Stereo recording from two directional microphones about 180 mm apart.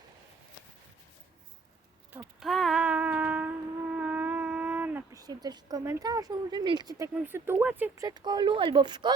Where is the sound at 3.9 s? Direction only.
10° right (ahead or behind).